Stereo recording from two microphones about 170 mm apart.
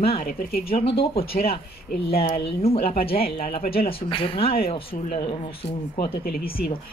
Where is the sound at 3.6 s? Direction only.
60° left (ahead or behind).